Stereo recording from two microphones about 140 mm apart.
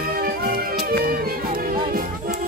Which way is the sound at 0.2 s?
90° right.